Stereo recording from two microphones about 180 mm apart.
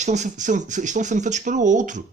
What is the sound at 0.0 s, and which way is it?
Speech, 40° right (ahead or behind).